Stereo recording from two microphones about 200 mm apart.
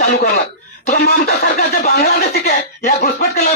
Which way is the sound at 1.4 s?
50° left (ahead or behind).